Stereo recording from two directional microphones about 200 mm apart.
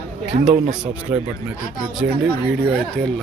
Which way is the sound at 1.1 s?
10° right (ahead or behind).